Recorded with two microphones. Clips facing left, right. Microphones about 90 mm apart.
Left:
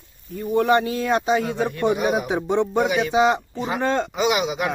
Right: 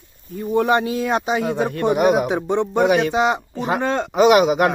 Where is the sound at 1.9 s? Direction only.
60° right (ahead or behind).